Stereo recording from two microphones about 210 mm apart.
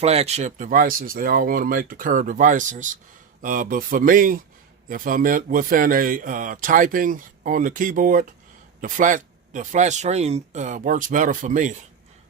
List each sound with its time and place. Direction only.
0.0 s a man's voice: 30° right (ahead or behind)